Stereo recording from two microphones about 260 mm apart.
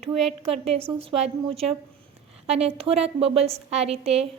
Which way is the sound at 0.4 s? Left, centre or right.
Right.